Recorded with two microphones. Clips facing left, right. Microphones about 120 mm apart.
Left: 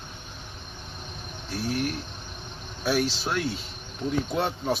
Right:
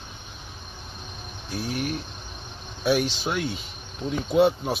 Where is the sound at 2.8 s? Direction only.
5° right (ahead or behind).